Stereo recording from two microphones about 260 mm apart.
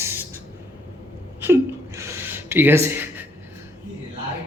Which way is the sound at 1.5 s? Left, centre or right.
Centre.